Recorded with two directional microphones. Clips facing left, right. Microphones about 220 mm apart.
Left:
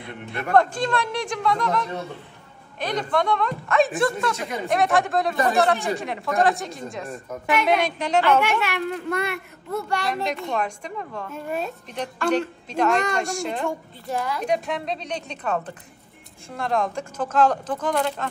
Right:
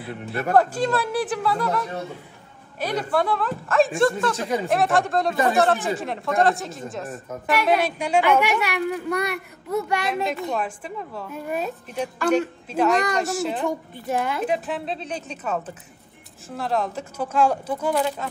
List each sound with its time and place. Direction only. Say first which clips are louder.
0.0 s a woman's voice: right 4 dB; 5° right (ahead or behind)
9.7 s a woman's voice: right 3 dB; 20° right (ahead or behind)
10.0 s a woman's voice: right 1 dB; 5° right (ahead or behind)
13.7 s a woman's voice: right 3 dB; 20° right (ahead or behind)
14.4 s a woman's voice: even; 5° right (ahead or behind)